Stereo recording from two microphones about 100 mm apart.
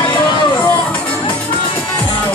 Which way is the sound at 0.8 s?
15° left (ahead or behind).